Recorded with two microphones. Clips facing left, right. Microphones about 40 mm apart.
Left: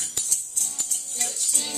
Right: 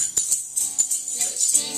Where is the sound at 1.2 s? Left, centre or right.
Centre.